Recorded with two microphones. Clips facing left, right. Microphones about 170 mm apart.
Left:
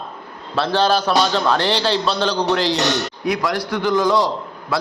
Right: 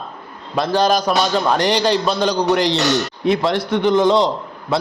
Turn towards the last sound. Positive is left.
turn(degrees=-20)  # may be behind; listen again after turning